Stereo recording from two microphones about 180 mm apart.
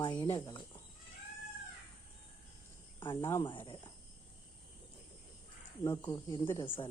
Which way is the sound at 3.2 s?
15° left (ahead or behind).